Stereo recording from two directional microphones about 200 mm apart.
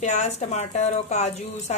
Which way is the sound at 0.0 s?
35° left (ahead or behind).